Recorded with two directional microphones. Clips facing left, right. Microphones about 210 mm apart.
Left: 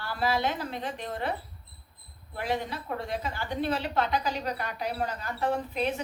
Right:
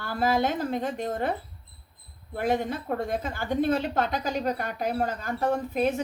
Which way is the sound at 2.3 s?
50° right (ahead or behind).